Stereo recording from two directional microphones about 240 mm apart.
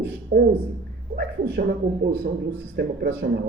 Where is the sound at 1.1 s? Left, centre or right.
Right.